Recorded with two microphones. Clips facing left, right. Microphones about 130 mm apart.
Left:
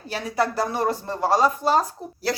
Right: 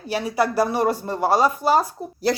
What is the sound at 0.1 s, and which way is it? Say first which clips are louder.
Speech: right 3 dB; 10° right (ahead or behind).